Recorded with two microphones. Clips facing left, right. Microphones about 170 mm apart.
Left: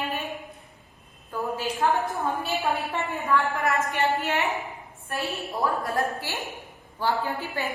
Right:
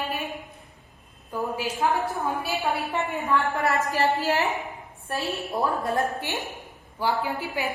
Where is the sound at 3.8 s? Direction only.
35° right (ahead or behind).